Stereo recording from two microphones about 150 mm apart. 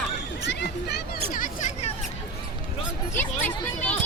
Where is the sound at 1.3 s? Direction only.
60° left (ahead or behind).